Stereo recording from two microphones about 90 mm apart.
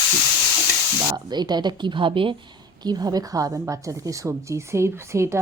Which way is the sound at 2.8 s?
45° right (ahead or behind).